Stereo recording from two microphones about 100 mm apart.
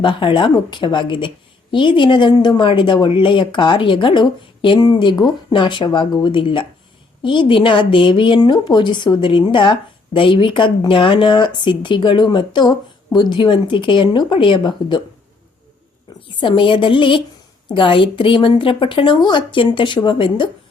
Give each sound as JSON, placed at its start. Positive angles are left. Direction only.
{"t": 0.0, "sound": "a woman's voice", "side_deg": 55}
{"t": 16.4, "sound": "a woman's voice", "side_deg": 55}